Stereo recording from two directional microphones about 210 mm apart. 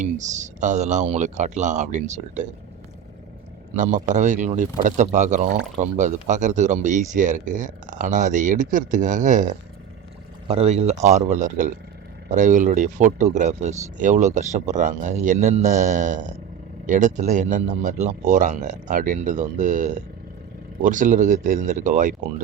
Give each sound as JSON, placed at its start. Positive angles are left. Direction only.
{"t": 0.0, "sound": "speech", "side_deg": -35}
{"t": 3.8, "sound": "speech", "side_deg": -35}